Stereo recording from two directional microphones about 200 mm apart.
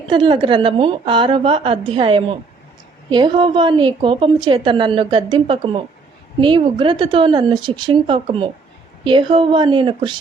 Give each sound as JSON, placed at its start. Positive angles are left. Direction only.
{"t": 0.1, "sound": "a woman's voice", "side_deg": -25}